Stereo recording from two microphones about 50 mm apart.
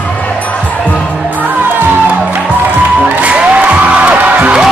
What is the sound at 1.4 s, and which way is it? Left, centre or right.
Music, right.